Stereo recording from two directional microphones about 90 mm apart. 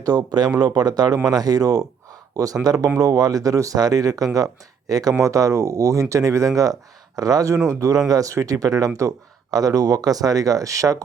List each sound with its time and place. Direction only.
0.0 s speech: 50° right (ahead or behind)